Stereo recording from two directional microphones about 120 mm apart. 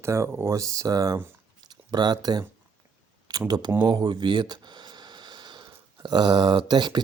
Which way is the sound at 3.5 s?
35° right (ahead or behind).